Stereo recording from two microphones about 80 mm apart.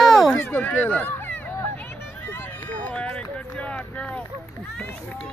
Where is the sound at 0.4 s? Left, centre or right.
Left.